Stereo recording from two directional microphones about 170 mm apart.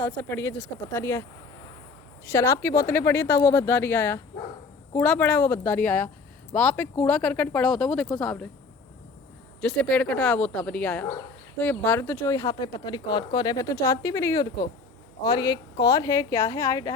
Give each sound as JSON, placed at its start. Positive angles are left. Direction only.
{"t": 0.2, "sound": "speech", "side_deg": 15}
{"t": 2.3, "sound": "speech", "side_deg": 15}
{"t": 9.6, "sound": "speech", "side_deg": 5}